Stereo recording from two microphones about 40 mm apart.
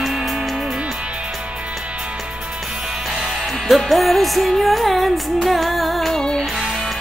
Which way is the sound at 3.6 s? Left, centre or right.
Centre.